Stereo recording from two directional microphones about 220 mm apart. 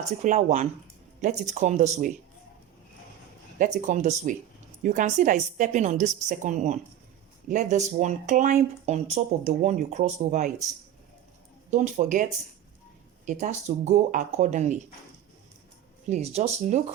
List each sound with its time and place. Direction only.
0.2 s speech: 30° right (ahead or behind)
3.8 s speech: 35° right (ahead or behind)
11.7 s speech: 35° right (ahead or behind)
16.0 s speech: 30° right (ahead or behind)